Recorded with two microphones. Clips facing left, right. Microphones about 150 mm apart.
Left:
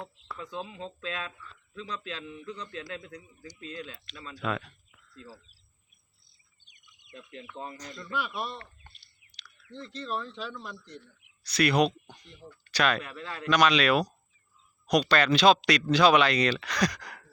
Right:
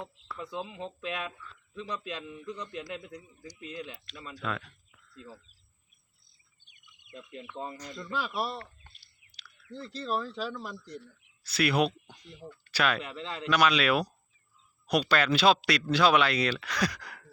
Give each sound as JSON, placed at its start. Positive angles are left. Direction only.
{"t": 0.3, "sound": "a man's voice", "side_deg": -10}
{"t": 4.0, "sound": "speech", "side_deg": 0}
{"t": 7.1, "sound": "a man's voice", "side_deg": -5}
{"t": 9.6, "sound": "speech", "side_deg": -35}
{"t": 11.4, "sound": "a man's voice", "side_deg": -5}
{"t": 13.1, "sound": "a man's voice", "side_deg": -20}
{"t": 13.5, "sound": "a man's voice", "side_deg": -5}